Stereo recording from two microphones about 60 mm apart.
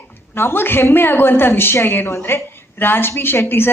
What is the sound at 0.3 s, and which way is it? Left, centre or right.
A woman's voice, left.